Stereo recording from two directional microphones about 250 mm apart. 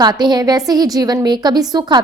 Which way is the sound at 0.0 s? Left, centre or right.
Centre.